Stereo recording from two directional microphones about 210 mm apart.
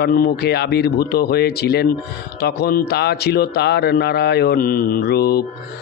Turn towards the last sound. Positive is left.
turn(degrees=50)  # may be behind; listen again after turning